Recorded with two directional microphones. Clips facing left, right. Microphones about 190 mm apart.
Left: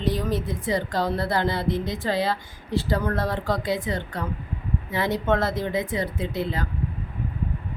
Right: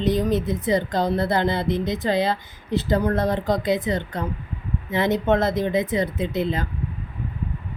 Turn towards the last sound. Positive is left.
turn(degrees=-20)  # may be behind; listen again after turning